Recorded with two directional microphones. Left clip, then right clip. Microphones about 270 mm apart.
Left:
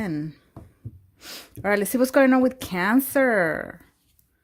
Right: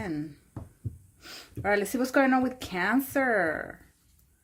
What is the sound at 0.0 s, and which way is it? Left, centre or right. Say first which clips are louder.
Speech: left 4 dB; left.